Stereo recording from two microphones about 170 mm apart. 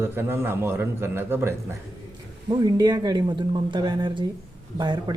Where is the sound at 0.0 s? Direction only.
15° right (ahead or behind).